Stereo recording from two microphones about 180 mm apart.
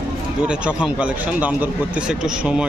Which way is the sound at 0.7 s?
5° right (ahead or behind).